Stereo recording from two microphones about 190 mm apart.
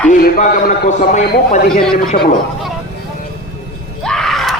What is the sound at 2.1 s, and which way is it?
Speech, 35° left (ahead or behind).